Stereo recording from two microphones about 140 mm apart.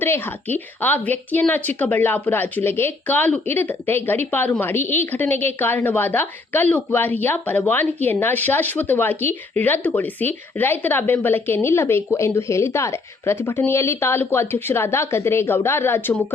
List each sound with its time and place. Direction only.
0.0 s speech: 15° left (ahead or behind)